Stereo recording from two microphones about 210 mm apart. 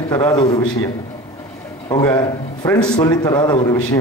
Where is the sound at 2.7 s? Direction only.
20° left (ahead or behind).